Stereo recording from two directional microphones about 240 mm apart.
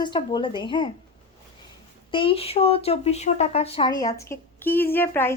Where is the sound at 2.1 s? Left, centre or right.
Left.